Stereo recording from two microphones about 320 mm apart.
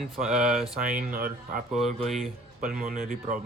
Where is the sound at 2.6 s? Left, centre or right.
Right.